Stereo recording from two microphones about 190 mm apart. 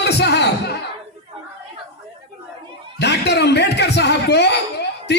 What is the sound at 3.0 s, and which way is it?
Speech, 60° left (ahead or behind).